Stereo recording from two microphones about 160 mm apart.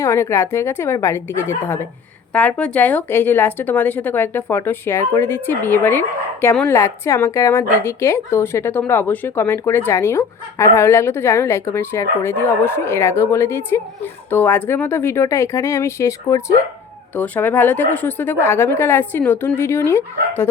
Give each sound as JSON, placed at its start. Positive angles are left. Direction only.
{"t": 0.0, "sound": "speech", "side_deg": 20}